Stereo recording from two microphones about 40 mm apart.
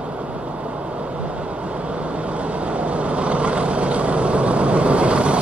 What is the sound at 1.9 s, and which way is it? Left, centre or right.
Vehicle, right.